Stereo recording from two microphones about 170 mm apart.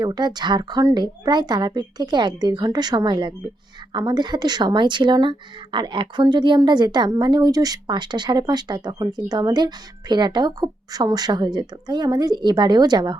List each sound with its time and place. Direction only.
0.0 s speech: 25° right (ahead or behind)